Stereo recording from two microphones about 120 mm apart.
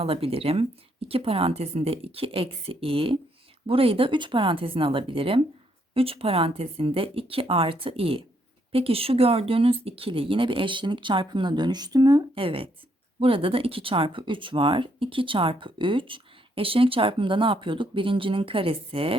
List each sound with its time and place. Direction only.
0.0 s speech: 50° right (ahead or behind); by 12.2 s 35° right (ahead or behind)
12.3 s speech: 50° right (ahead or behind)